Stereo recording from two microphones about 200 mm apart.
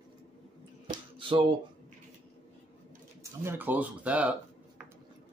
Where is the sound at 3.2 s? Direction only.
10° right (ahead or behind).